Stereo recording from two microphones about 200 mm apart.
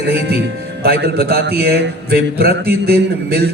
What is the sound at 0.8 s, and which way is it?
Speech, 50° right (ahead or behind).